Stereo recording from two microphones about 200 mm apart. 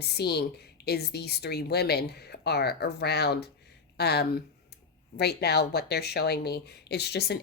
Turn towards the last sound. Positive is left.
turn(degrees=55)  # may be behind; listen again after turning